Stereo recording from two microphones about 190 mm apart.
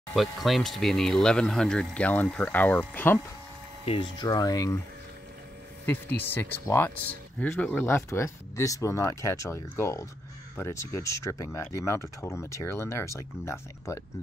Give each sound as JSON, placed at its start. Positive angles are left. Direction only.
{"t": 0.1, "sound": "speech", "side_deg": 0}
{"t": 3.8, "sound": "speech", "side_deg": 25}
{"t": 5.9, "sound": "speech", "side_deg": 10}